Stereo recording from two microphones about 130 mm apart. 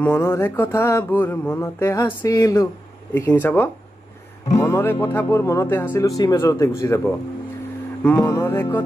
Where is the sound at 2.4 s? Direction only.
30° left (ahead or behind).